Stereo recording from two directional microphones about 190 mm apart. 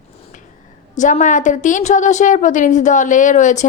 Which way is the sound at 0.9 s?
40° left (ahead or behind).